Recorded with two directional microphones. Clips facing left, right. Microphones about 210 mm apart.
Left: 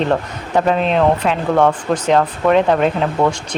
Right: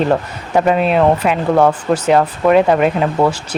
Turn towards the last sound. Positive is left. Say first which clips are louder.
# right 2 dB
turn(degrees=-5)  # may be behind; listen again after turning